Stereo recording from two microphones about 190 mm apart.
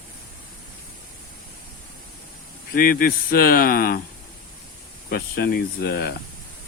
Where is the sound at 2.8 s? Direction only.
50° left (ahead or behind).